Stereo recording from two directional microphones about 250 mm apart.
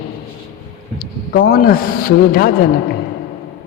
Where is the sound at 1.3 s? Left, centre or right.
Left.